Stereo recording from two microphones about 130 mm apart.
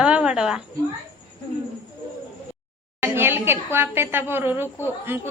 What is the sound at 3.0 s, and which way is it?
A woman's voice, 15° right (ahead or behind).